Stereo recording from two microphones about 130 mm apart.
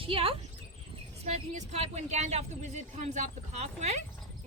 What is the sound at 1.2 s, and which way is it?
Speech, 55° right (ahead or behind).